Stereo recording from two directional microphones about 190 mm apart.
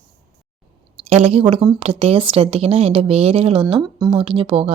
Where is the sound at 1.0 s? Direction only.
35° right (ahead or behind).